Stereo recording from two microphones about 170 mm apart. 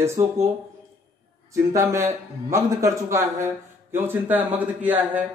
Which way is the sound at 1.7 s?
15° right (ahead or behind).